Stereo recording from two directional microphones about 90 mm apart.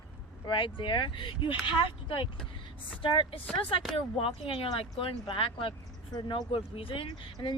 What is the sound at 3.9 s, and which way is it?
A woman's voice, 85° left.